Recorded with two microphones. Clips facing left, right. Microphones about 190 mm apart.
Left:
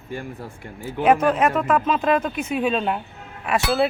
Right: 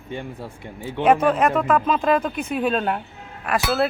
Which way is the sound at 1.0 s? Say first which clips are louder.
Even; centre (ahead or behind).